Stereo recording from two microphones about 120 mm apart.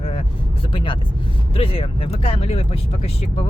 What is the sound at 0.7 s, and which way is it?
Speech, 45° left (ahead or behind).